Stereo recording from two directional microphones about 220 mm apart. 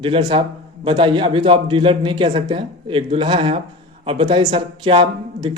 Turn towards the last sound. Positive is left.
turn(degrees=-20)  # may be behind; listen again after turning